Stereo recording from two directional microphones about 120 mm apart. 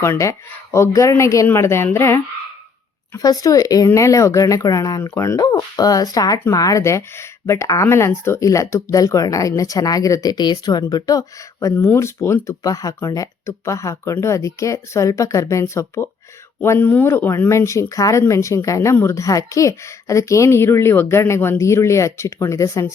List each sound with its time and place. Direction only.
0.0 s speech: 25° left (ahead or behind)